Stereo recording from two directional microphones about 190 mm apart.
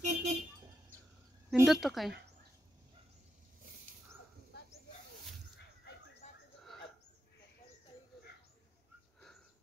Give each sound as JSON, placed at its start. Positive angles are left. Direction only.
{"t": 0.0, "sound": "vehicle", "side_deg": -35}
{"t": 1.5, "sound": "a woman's voice", "side_deg": 0}